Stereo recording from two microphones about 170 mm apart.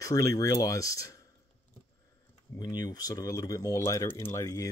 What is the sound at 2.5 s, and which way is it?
Speech, 25° left (ahead or behind).